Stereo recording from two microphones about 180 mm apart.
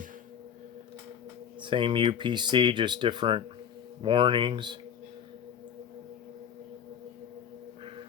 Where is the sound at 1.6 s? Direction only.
25° right (ahead or behind).